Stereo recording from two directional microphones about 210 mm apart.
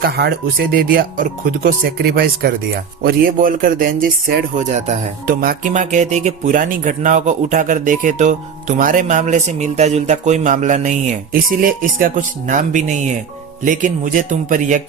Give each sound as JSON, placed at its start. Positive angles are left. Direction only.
{"t": 0.0, "sound": "speech", "side_deg": -50}